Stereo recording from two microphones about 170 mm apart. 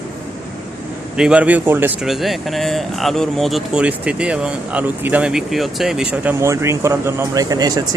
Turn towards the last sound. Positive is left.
turn(degrees=-25)  # may be behind; listen again after turning